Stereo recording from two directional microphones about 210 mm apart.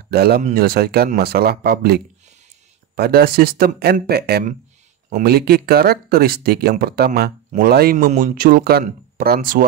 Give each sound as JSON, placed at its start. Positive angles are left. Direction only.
{"t": 0.1, "sound": "speech", "side_deg": -50}
{"t": 3.0, "sound": "speech", "side_deg": -45}